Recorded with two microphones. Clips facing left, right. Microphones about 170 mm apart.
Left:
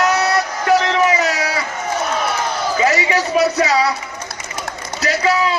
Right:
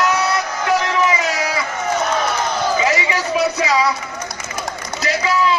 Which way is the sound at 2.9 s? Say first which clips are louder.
Left 2 dB; 40° left (ahead or behind).